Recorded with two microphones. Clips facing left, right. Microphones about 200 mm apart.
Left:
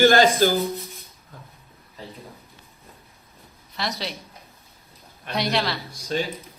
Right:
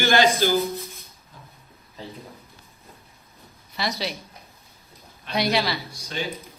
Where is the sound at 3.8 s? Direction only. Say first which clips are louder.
Right 2 dB; centre (ahead or behind).